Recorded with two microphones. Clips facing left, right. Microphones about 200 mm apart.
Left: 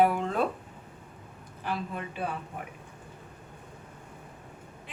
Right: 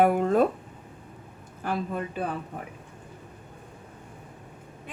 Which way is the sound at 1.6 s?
45° right (ahead or behind).